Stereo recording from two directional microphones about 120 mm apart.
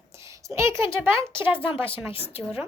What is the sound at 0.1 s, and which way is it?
A woman's voice, 25° right (ahead or behind).